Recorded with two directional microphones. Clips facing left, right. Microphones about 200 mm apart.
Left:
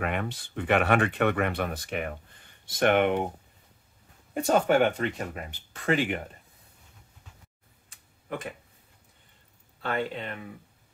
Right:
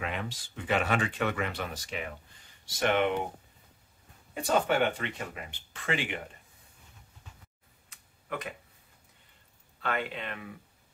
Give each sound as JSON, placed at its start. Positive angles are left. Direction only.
{"t": 0.0, "sound": "speech", "side_deg": 55}
{"t": 4.3, "sound": "speech", "side_deg": 45}
{"t": 9.8, "sound": "speech", "side_deg": 35}